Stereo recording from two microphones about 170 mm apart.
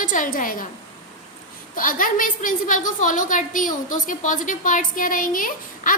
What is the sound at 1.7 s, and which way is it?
A woman's voice, 55° left (ahead or behind).